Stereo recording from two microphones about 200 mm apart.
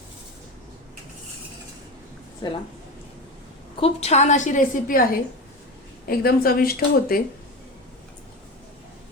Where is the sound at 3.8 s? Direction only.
30° left (ahead or behind); by 7.2 s 45° left (ahead or behind).